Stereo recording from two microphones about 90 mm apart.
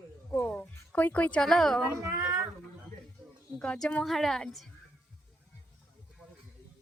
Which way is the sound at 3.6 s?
5° left (ahead or behind).